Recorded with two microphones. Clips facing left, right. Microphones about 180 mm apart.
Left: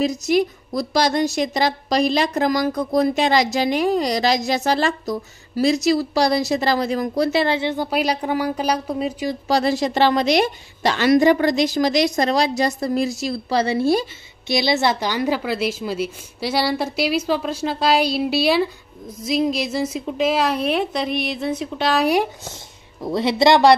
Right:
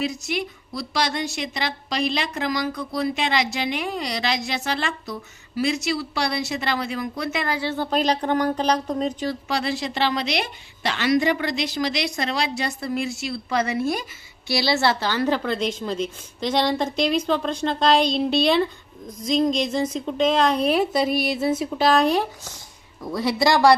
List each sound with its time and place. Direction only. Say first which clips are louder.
0.0 s a woman's voice: left 8 dB; 40° left (ahead or behind); by 9.4 s 10° left (ahead or behind)
9.5 s a woman's voice: left 11 dB; 40° left (ahead or behind)
14.5 s a woman's voice: left 2 dB; 20° left (ahead or behind)
23.1 s speech: left 5 dB; 25° left (ahead or behind)